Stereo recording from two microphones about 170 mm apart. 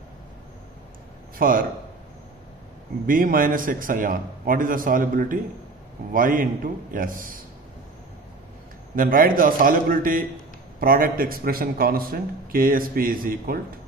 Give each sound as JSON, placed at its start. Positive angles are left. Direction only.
{"t": 1.4, "sound": "a man's voice", "side_deg": -55}
{"t": 3.1, "sound": "a man's voice", "side_deg": -55}
{"t": 8.9, "sound": "a man's voice", "side_deg": -55}